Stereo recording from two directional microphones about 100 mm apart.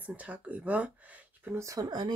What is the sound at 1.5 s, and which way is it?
Speech, 35° right (ahead or behind).